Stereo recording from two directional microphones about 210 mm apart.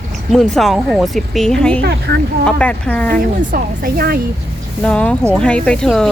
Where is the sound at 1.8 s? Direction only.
50° right (ahead or behind).